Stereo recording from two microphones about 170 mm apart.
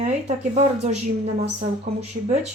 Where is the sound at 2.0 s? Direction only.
40° right (ahead or behind).